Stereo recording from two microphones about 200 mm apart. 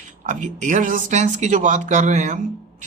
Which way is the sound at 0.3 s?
40° right (ahead or behind).